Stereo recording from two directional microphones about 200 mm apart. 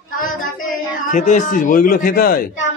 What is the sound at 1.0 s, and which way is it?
Speech, 40° left (ahead or behind).